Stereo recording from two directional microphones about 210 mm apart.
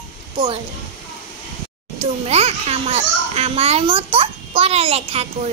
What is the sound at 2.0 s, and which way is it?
A child's voice, 30° right (ahead or behind).